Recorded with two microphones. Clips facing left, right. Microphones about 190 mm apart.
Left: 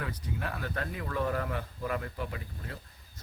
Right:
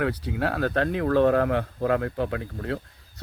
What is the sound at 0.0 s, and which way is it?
Speech, 75° right (ahead or behind).